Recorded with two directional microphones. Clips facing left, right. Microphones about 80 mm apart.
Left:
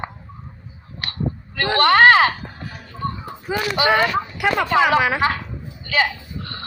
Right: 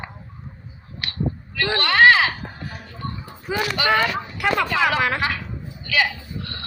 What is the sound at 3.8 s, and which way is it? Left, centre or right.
Speech, left.